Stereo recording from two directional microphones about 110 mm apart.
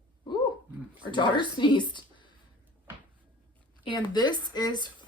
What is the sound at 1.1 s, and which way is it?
Speech, 45° left (ahead or behind).